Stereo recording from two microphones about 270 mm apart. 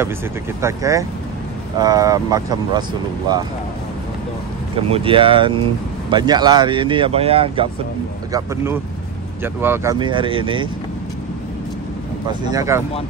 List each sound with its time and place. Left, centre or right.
0.6 s speech: centre
4.7 s speech: right
12.3 s speech: centre